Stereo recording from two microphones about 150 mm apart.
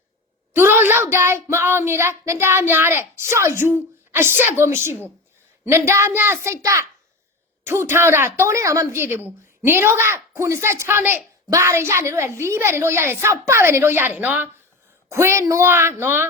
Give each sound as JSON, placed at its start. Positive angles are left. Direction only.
{"t": 0.5, "sound": "child singing", "side_deg": -15}